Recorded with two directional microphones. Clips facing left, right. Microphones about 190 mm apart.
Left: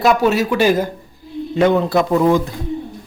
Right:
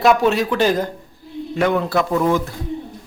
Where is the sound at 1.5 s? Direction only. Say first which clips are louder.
Left 4 dB; 25° left (ahead or behind).